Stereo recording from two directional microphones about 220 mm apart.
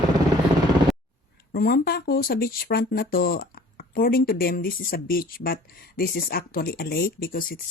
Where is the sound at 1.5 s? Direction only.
45° left (ahead or behind).